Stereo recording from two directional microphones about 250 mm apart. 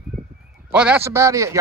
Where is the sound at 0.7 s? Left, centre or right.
Centre.